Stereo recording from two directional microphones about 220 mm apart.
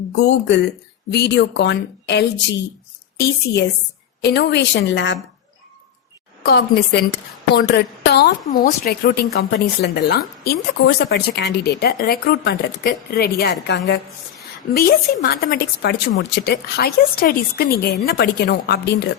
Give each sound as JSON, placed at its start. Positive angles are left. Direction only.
{"t": 0.2, "sound": "a woman's voice", "side_deg": 50}
{"t": 4.2, "sound": "a woman's voice", "side_deg": 50}
{"t": 6.4, "sound": "a woman's voice", "side_deg": 45}